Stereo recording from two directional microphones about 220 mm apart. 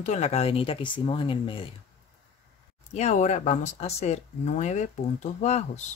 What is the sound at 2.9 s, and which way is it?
Speech, 30° left (ahead or behind).